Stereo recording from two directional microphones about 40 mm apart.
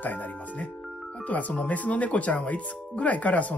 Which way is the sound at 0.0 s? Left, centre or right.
Left.